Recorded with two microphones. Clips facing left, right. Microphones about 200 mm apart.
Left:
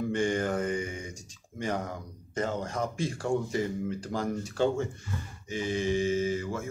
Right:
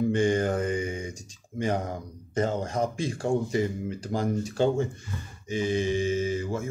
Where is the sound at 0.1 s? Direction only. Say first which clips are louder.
Right 4 dB; 20° right (ahead or behind).